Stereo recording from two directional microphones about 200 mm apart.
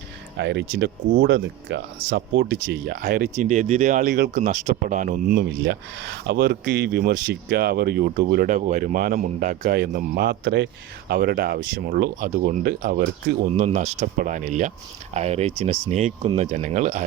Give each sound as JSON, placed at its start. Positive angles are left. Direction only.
{"t": 0.3, "sound": "speech", "side_deg": -60}
{"t": 12.3, "sound": "speech", "side_deg": -40}